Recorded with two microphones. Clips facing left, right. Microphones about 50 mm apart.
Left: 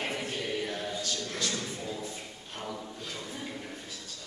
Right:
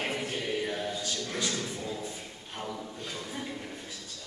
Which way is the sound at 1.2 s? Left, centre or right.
Centre.